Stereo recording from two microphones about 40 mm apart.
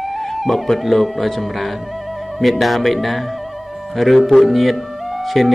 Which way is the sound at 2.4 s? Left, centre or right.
Centre.